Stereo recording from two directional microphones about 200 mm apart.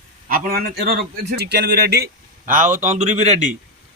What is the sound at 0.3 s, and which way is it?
A man's voice, 50° right (ahead or behind).